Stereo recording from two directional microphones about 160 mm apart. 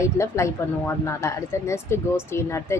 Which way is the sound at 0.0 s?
20° left (ahead or behind).